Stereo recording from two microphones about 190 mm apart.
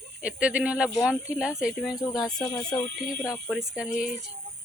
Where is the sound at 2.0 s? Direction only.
20° left (ahead or behind).